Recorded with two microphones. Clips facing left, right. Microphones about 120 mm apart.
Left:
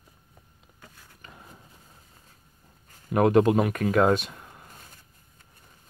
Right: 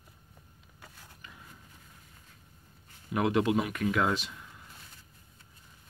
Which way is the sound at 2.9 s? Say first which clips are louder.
Left 8 dB; 45° left (ahead or behind).